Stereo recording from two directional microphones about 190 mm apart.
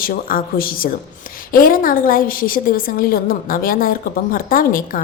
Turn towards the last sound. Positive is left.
turn(degrees=45)  # may be behind; listen again after turning